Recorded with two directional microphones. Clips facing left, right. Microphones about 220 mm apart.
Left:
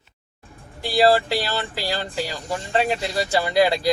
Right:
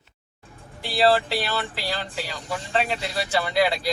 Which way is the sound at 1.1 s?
40° left (ahead or behind).